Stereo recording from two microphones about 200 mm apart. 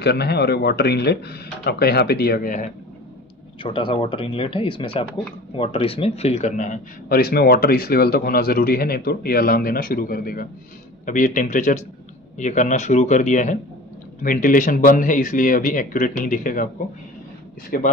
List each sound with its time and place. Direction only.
0.0 s speech: 55° left (ahead or behind)
3.6 s a man's voice: 25° left (ahead or behind); by 16.6 s 45° left (ahead or behind)
17.6 s speech: 45° left (ahead or behind)